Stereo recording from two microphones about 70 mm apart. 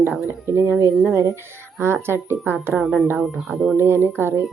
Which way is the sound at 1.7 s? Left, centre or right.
Right.